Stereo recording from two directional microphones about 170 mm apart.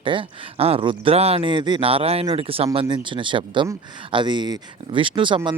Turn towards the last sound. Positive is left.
turn(degrees=-30)  # may be behind; listen again after turning